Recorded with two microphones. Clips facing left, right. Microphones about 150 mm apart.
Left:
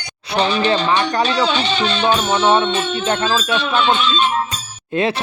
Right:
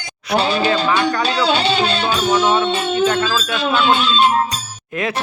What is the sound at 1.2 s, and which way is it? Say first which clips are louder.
Speech: right 1 dB; 35° right (ahead or behind).